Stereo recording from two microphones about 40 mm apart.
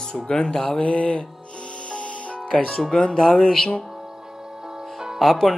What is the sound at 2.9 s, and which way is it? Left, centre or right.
Speech, centre.